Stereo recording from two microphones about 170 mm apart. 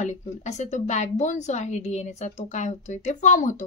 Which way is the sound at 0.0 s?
45° left (ahead or behind).